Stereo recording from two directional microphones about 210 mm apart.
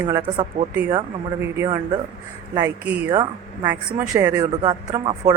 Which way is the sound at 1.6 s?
20° right (ahead or behind).